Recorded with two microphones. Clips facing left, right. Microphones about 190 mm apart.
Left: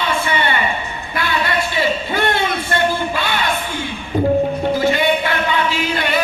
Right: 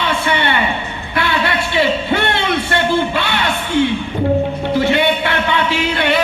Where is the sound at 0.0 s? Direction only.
65° right (ahead or behind).